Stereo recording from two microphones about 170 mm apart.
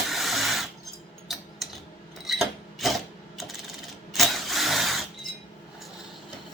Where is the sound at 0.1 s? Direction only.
Centre (ahead or behind).